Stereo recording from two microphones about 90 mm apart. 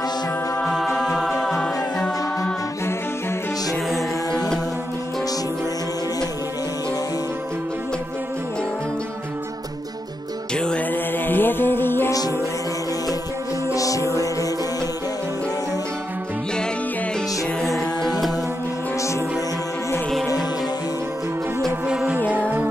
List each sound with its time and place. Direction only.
0.7 s music: 5° left (ahead or behind)
10.5 s music: 10° left (ahead or behind)
10.9 s music: 20° left (ahead or behind)
13.7 s music: 40° left (ahead or behind)
17.6 s music: 5° left (ahead or behind)
18.9 s music: 35° left (ahead or behind)
21.8 s music: 10° right (ahead or behind)